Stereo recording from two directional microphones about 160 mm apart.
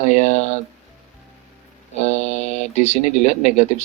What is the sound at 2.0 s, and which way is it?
Speech, 45° left (ahead or behind).